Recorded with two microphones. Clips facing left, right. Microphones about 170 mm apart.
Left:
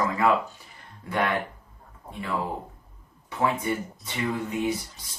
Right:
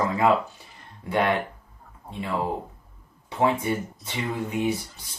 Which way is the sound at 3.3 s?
25° right (ahead or behind).